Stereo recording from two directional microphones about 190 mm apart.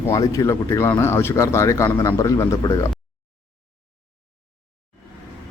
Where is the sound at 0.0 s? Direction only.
15° left (ahead or behind).